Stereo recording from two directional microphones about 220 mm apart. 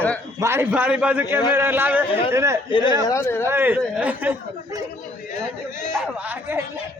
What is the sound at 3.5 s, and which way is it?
Speech, 10° right (ahead or behind).